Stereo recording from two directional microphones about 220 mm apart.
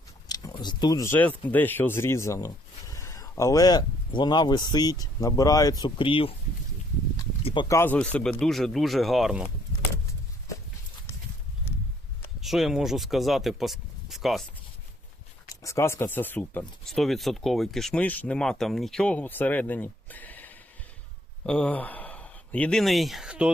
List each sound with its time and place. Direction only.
0.3 s speech: 15° left (ahead or behind)
7.4 s speech: 20° left (ahead or behind); by 9.5 s 5° right (ahead or behind)
12.4 s speech: centre (ahead or behind)
15.6 s speech: 15° left (ahead or behind); by 23.5 s 5° right (ahead or behind)